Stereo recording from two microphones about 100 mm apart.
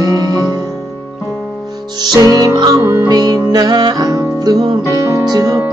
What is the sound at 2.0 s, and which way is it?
Music, 40° right (ahead or behind).